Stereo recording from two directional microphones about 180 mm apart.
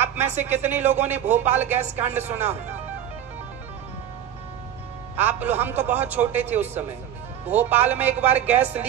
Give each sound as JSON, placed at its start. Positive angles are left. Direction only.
{"t": 0.0, "sound": "a sound", "side_deg": -10}
{"t": 0.4, "sound": "a man's voice", "side_deg": -10}
{"t": 5.1, "sound": "a man's voice", "side_deg": -10}